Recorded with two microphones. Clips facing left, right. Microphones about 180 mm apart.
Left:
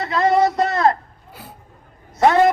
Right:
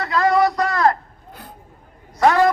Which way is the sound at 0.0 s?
20° left (ahead or behind).